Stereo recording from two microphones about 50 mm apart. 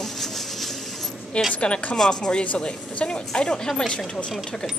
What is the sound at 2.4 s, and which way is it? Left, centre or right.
Speech, left.